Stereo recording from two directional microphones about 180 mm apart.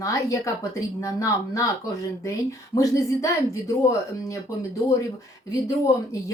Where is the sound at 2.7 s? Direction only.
20° left (ahead or behind).